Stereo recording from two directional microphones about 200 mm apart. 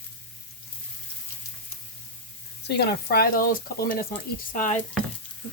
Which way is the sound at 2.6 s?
55° left (ahead or behind).